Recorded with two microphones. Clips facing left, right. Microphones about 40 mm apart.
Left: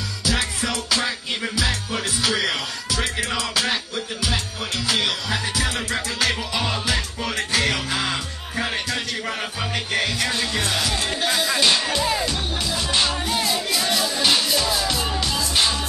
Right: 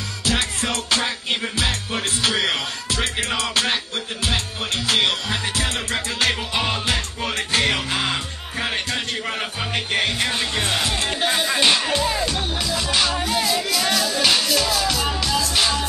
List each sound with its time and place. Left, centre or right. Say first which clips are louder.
0.2 s music: right 1 dB; right
9.9 s speech: right 1 dB; right
13.2 s music: right 2 dB; centre